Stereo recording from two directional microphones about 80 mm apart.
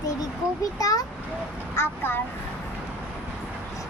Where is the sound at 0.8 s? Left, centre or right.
Left.